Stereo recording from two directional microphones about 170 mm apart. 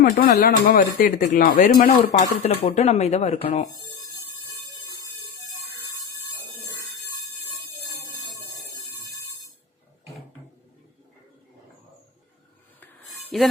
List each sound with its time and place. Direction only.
0.0 s speech: 65° left (ahead or behind)
2.4 s speech: 35° left (ahead or behind)
13.3 s speech: 5° left (ahead or behind)